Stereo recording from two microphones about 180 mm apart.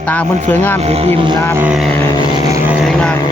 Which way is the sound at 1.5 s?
5° right (ahead or behind).